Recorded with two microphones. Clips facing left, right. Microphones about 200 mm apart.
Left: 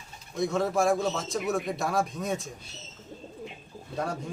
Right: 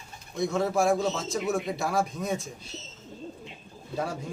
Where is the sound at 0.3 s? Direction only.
Centre (ahead or behind).